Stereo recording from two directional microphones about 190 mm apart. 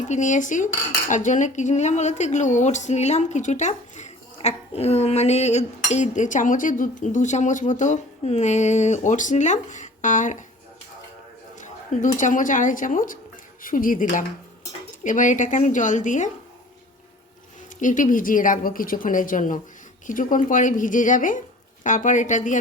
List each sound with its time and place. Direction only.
0.1 s a woman's voice: 40° left (ahead or behind)
11.5 s a woman's voice: 40° left (ahead or behind)
17.7 s a woman's voice: 45° left (ahead or behind)